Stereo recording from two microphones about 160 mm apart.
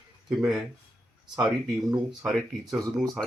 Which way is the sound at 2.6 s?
25° right (ahead or behind).